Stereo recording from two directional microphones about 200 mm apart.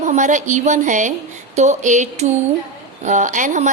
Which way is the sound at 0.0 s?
35° right (ahead or behind).